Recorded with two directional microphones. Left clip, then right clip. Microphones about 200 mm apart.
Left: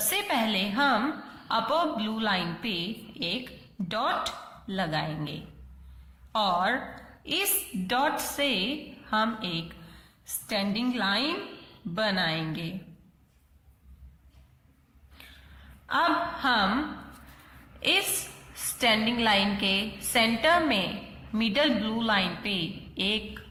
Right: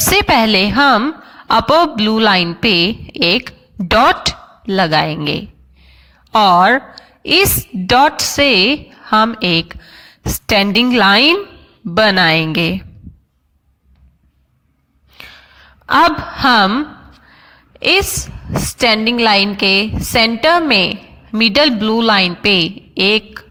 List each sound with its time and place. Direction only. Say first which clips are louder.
0.1 s a woman's voice: right 16 dB; 50° right (ahead or behind)
15.9 s a woman's voice: right 14 dB; 50° right (ahead or behind)
17.7 s a woman's voice: right 13 dB; 45° right (ahead or behind)